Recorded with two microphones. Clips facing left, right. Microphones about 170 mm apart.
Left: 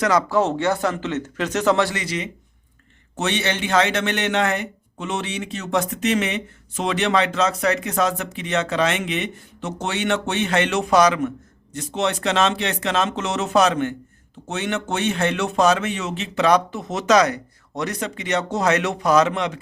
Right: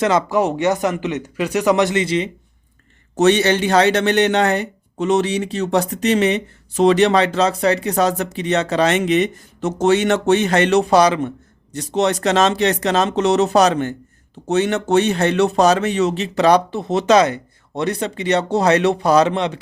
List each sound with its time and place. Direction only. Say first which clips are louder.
0.0 s speech: right 2 dB; 25° right (ahead or behind)
3.2 s speech: right 9 dB; 40° right (ahead or behind)